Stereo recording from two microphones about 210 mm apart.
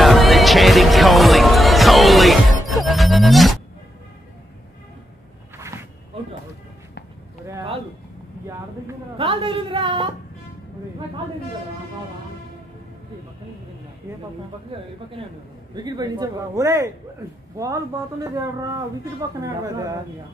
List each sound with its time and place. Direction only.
0.0 s music: centre (ahead or behind)
5.6 s a sound: 15° right (ahead or behind)
9.2 s a woman's voice: 25° right (ahead or behind)
15.7 s a man's voice: 20° right (ahead or behind)